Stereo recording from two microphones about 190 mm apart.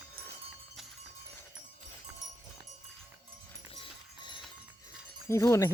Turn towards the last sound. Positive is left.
turn(degrees=15)  # may be behind; listen again after turning